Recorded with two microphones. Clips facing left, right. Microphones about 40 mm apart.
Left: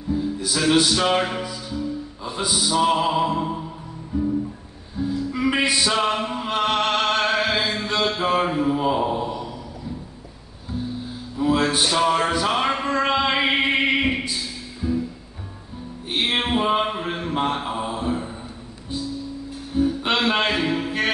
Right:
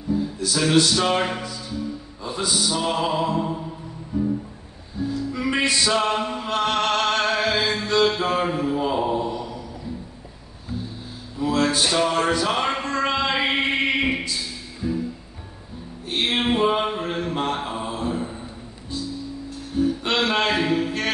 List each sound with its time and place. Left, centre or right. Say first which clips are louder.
0.4 s music: right 1 dB; centre
0.7 s mantra: right 1 dB; centre
5.3 s music: left 1 dB; centre
11.3 s a sound: left 1 dB; centre
14.8 s music: left 2 dB; centre
16.1 s mantra: even; centre
19.7 s a sound: left 1 dB; centre